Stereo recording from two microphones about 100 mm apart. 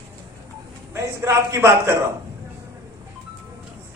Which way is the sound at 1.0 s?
25° right (ahead or behind).